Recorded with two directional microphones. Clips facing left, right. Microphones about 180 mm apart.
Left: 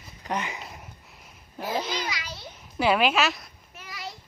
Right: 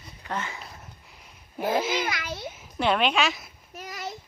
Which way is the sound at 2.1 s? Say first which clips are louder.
Right 4 dB; 55° right (ahead or behind).